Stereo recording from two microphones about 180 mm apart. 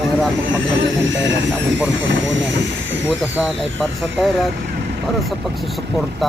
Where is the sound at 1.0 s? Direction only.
90° right.